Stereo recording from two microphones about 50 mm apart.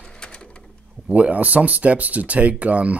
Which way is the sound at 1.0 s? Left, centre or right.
Right.